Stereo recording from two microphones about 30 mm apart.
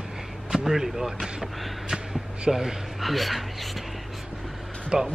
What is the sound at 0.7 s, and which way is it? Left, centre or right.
Speech, centre.